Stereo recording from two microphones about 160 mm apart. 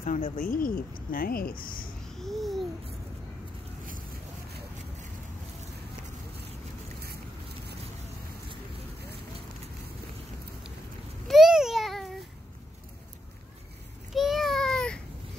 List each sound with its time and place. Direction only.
0.0 s speech: 50° left (ahead or behind)
2.0 s babbling: centre (ahead or behind)
11.2 s babbling: centre (ahead or behind)
14.1 s a sound: centre (ahead or behind)